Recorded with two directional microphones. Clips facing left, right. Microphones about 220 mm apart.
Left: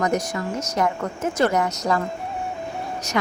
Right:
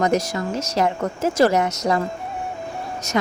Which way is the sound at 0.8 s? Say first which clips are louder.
Right 2 dB; 30° right (ahead or behind).